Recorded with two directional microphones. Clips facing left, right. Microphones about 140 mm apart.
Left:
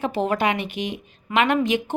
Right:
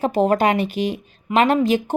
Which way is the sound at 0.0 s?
40° right (ahead or behind).